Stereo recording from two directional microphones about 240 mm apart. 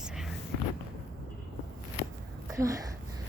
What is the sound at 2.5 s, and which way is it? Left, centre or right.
Speech, centre.